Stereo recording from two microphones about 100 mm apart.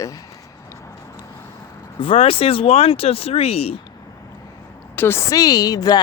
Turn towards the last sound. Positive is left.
turn(degrees=40)  # may be behind; listen again after turning